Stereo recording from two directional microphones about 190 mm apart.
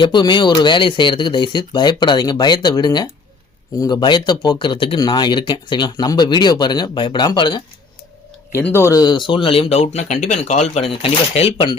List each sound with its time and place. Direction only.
0.0 s speech: 25° left (ahead or behind)
8.5 s speech: 10° left (ahead or behind); by 11.7 s 30° left (ahead or behind)